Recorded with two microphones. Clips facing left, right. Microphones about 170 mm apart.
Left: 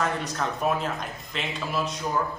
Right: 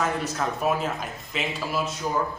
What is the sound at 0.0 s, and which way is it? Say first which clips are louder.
A man's voice: right 1 dB; 5° right (ahead or behind).